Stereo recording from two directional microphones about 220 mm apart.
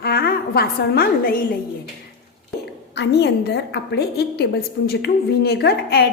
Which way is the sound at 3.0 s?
50° left (ahead or behind).